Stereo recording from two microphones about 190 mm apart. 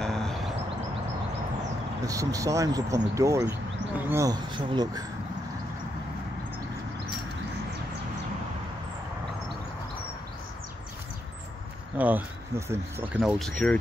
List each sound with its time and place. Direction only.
0.0 s a sound: 5° left (ahead or behind)
2.0 s speech: 15° right (ahead or behind)
12.0 s speech: 10° right (ahead or behind); by 13.7 s 5° left (ahead or behind)